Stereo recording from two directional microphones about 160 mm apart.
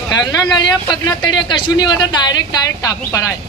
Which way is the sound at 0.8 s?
25° left (ahead or behind).